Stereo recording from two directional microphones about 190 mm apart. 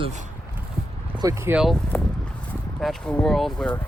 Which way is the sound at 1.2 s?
15° right (ahead or behind).